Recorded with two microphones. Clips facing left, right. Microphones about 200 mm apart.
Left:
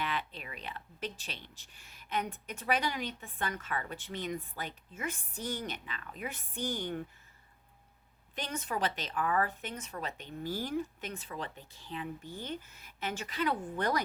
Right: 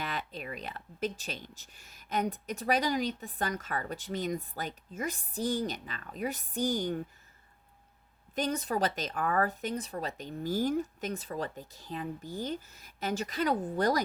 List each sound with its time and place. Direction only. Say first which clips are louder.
0.0 s speech: even; 40° right (ahead or behind)
8.4 s speech: right 5 dB; 35° right (ahead or behind)